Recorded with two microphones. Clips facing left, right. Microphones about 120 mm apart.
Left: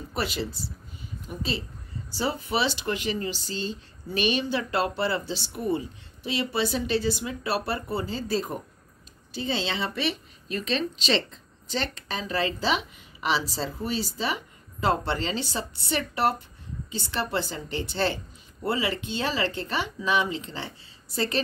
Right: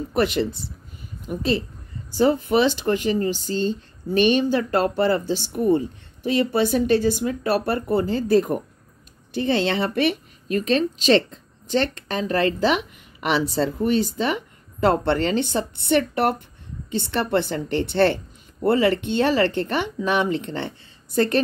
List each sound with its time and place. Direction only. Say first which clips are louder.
0.1 s a woman's voice: right 9 dB; 50° right (ahead or behind)